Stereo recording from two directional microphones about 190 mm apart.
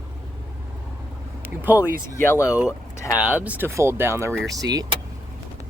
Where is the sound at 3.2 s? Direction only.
5° right (ahead or behind).